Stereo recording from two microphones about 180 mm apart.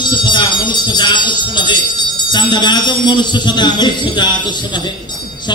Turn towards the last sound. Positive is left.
turn(degrees=25)  # may be behind; listen again after turning